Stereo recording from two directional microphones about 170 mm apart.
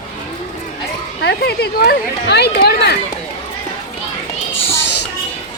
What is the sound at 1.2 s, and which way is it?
Speech, 75° left (ahead or behind).